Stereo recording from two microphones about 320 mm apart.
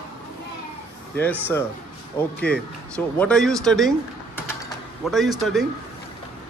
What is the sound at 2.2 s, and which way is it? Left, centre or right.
Speech, centre.